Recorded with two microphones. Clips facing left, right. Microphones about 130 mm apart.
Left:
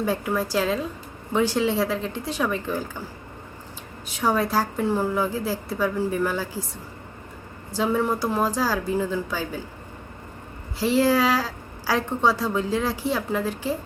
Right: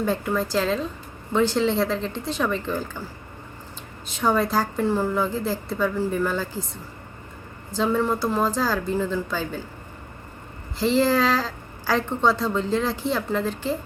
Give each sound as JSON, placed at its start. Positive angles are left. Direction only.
{"t": 0.0, "sound": "a woman's voice", "side_deg": 10}
{"t": 7.7, "sound": "a woman's voice", "side_deg": 10}
{"t": 10.8, "sound": "a woman's voice", "side_deg": 10}